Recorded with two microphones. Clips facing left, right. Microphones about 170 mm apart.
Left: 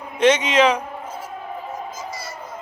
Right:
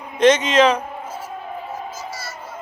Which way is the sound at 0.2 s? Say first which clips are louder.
Right 2 dB; 10° left (ahead or behind).